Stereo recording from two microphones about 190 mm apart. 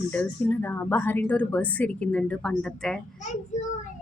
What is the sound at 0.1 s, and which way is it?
Speech, 10° left (ahead or behind).